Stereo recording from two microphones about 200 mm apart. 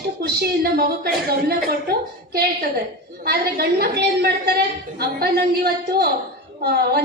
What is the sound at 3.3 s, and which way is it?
A woman's voice, 50° right (ahead or behind).